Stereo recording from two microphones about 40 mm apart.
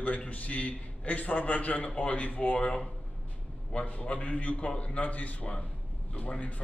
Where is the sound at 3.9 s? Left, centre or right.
Left.